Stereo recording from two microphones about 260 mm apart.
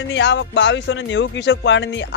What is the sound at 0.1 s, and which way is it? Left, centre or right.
Speech, left.